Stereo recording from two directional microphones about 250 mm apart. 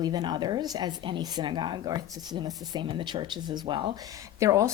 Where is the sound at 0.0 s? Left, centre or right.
Centre.